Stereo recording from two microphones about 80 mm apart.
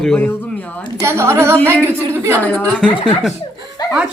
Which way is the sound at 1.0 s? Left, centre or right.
Right.